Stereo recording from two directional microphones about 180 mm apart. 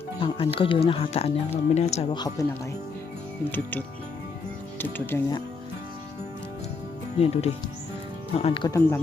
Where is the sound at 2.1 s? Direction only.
20° left (ahead or behind).